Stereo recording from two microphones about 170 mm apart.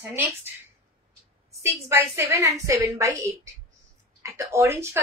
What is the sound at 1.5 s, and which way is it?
A woman's voice, 15° right (ahead or behind).